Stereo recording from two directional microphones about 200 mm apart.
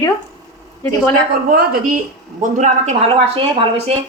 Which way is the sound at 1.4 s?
45° right (ahead or behind).